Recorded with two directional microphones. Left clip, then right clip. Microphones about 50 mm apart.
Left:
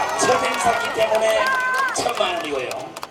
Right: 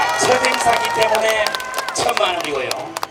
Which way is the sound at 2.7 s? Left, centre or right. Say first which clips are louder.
Right 5 dB; right.